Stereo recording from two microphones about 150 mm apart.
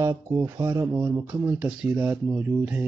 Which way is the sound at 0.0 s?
20° right (ahead or behind).